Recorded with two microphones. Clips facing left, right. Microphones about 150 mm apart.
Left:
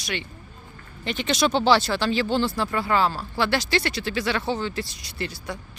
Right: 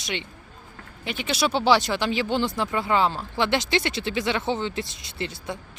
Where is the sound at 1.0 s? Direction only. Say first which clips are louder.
Left 2 dB; 10° right (ahead or behind).